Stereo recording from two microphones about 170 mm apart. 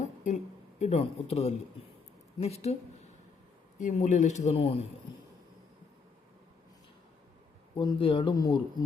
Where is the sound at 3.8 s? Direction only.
45° left (ahead or behind).